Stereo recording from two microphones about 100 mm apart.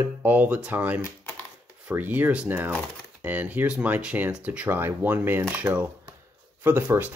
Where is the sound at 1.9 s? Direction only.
15° right (ahead or behind).